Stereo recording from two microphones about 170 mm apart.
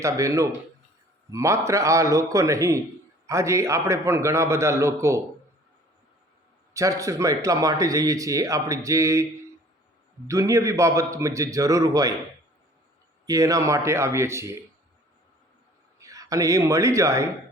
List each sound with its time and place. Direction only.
0.0 s a man's voice: 20° right (ahead or behind)
6.7 s speech: 20° right (ahead or behind)
10.2 s a man's voice: 20° right (ahead or behind)
13.2 s a man's voice: 20° right (ahead or behind)
16.0 s a man's voice: 20° right (ahead or behind)